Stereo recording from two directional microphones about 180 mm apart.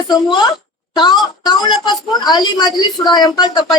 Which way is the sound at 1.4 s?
25° left (ahead or behind).